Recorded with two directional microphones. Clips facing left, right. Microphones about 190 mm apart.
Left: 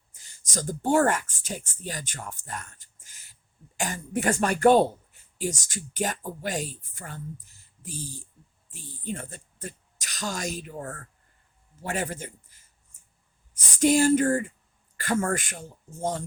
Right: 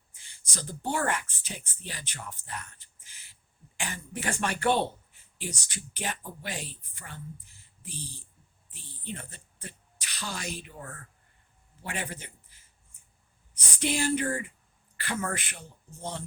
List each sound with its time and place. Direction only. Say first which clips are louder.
0.1 s speech: left 8 dB; 45° left (ahead or behind)
13.7 s speech: left 8 dB; 45° left (ahead or behind)